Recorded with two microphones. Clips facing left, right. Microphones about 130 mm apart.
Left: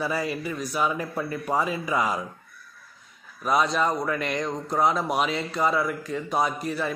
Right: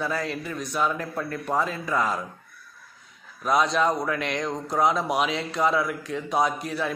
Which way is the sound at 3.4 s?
Centre (ahead or behind).